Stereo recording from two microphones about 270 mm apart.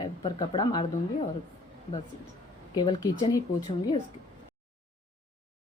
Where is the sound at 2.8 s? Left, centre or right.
Centre.